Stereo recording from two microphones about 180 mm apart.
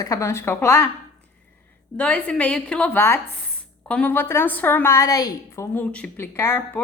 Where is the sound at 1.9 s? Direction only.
5° left (ahead or behind).